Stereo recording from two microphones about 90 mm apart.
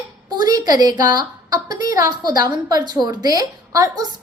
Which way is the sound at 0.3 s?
45° right (ahead or behind).